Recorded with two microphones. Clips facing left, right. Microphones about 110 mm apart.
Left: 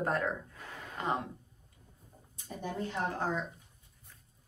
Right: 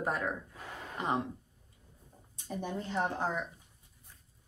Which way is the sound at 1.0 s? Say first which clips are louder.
Even; 20° right (ahead or behind).